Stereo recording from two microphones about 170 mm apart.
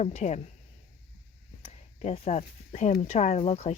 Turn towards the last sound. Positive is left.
turn(degrees=40)  # may be behind; listen again after turning